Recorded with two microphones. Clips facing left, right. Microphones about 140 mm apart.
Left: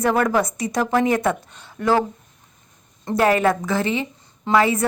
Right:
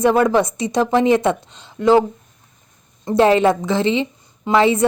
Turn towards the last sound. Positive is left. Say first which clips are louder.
# right 3 dB
turn(degrees=-25)  # may be behind; listen again after turning